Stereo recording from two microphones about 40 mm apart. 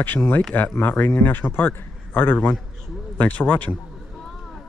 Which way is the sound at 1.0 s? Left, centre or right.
Left.